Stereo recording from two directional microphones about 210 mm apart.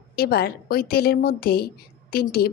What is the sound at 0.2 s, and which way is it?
A woman's voice, 50° left (ahead or behind).